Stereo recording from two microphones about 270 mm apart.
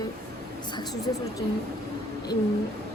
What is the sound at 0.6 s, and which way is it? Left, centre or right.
Speech, centre.